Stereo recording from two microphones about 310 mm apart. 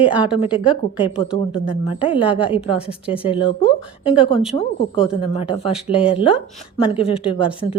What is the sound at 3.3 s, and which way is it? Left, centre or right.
A woman's voice, centre.